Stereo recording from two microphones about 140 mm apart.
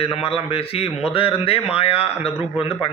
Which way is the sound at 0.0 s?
45° left (ahead or behind).